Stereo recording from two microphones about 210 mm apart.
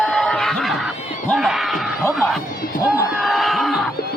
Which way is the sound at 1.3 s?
Centre (ahead or behind).